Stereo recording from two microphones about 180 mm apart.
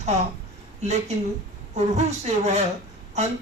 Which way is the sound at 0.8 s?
40° right (ahead or behind).